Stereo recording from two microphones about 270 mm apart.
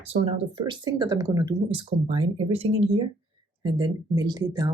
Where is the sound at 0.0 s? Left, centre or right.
Right.